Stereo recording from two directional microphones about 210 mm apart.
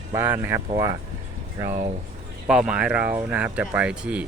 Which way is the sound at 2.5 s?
5° right (ahead or behind).